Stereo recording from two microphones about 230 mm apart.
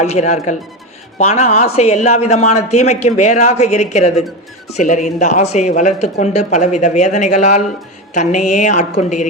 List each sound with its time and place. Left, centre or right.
0.0 s speech: left